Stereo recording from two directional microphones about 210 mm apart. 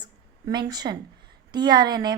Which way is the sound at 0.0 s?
20° right (ahead or behind).